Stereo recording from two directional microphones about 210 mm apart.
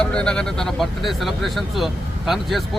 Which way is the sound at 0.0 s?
5° left (ahead or behind).